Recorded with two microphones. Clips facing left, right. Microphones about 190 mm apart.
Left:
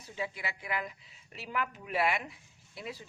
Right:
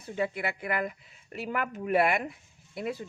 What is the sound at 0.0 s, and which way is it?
A man's voice, 55° right (ahead or behind).